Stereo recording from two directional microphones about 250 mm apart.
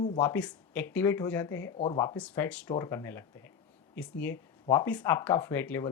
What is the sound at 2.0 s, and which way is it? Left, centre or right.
Speech, centre.